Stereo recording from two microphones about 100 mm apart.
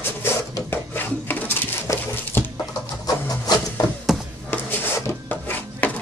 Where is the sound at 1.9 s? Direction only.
30° left (ahead or behind).